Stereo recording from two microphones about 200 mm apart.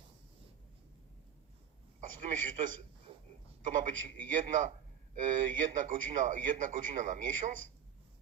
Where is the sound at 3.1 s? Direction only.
25° right (ahead or behind).